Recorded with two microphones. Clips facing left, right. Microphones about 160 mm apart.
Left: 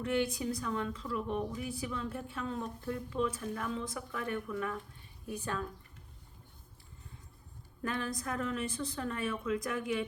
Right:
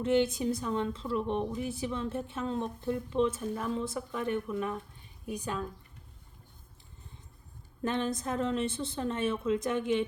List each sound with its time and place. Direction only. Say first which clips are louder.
0.0 s a woman's voice: right 5 dB; 25° right (ahead or behind)
7.8 s a woman's voice: right 5 dB; 25° right (ahead or behind)